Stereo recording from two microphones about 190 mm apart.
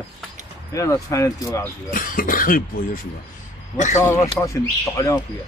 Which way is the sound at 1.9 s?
45° left (ahead or behind).